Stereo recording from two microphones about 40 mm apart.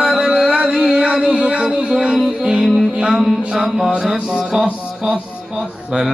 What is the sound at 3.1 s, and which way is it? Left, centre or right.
Mantra, centre.